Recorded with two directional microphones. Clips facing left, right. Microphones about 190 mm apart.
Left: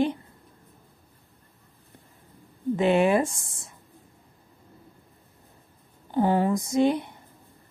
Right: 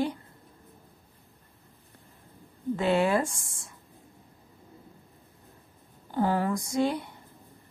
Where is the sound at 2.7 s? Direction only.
20° left (ahead or behind).